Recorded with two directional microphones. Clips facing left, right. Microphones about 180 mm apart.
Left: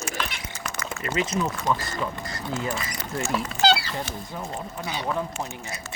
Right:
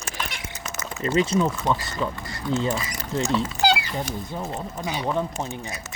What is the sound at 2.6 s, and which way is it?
Speech, 20° right (ahead or behind).